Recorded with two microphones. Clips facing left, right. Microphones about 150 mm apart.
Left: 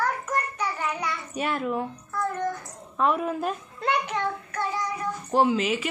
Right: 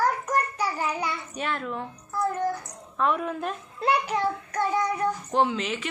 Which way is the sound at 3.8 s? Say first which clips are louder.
Right 3 dB; 35° right (ahead or behind).